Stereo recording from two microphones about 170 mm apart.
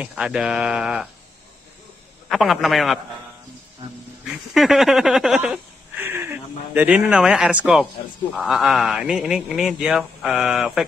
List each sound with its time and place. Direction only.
0.0 s speech: 5° right (ahead or behind)
2.2 s speech: centre (ahead or behind)
4.6 s speech: centre (ahead or behind)